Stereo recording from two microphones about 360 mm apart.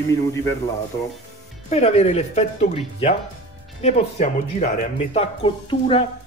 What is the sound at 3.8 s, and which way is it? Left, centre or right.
Speech, centre.